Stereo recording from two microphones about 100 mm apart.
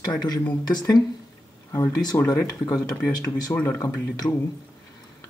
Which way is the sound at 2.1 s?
40° left (ahead or behind).